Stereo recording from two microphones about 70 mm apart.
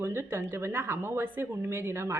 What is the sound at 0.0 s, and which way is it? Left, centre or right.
A woman's voice, right.